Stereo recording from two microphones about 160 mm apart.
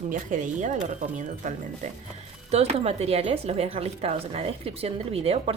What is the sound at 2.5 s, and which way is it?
Speech, 40° right (ahead or behind).